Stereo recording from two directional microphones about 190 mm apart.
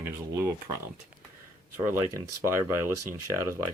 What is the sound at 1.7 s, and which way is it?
Speech, 10° right (ahead or behind).